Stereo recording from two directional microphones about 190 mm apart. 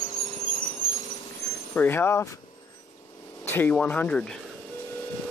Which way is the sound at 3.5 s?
10° left (ahead or behind).